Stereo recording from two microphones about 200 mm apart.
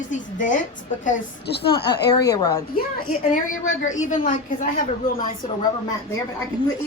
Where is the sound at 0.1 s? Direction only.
40° left (ahead or behind).